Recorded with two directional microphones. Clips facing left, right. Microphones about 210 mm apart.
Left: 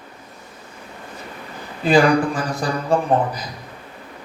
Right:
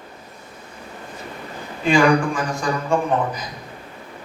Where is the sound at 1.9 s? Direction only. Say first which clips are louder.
Left 1 dB; 35° left (ahead or behind).